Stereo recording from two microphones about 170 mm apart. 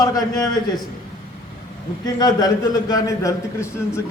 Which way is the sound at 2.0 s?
20° left (ahead or behind).